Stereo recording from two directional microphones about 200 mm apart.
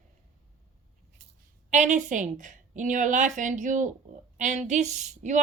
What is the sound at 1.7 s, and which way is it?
A woman's voice, 35° right (ahead or behind).